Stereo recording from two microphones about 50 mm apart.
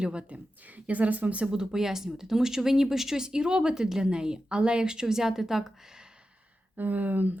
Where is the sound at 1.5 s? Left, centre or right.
Centre.